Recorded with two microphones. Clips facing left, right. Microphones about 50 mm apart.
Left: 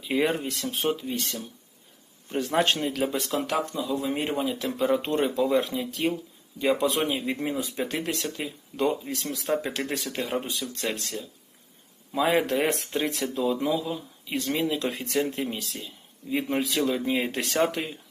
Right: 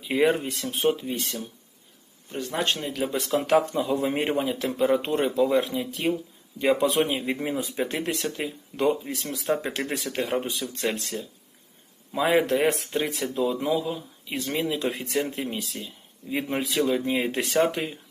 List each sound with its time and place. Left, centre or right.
0.0 s speech: centre
2.3 s speech: centre
3.3 s speech: centre
3.7 s speech: right
4.1 s a man's voice: right
4.4 s speech: centre
10.8 s speech: centre